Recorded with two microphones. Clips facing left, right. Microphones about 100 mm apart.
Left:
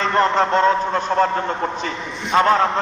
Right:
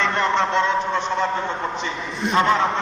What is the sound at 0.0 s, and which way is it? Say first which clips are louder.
A man's voice: left 3 dB; 40° left (ahead or behind).